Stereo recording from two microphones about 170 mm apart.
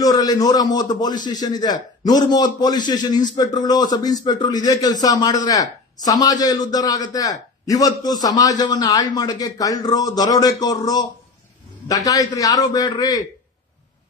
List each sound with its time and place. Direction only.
0.0 s a man's voice: 20° left (ahead or behind)